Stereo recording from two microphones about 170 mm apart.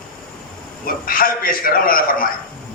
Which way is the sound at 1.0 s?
55° left (ahead or behind).